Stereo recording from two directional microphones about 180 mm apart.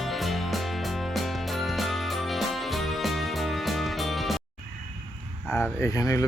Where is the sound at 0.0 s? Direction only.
Centre (ahead or behind).